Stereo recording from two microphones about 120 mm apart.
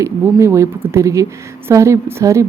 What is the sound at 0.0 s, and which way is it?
A woman's voice, 25° right (ahead or behind).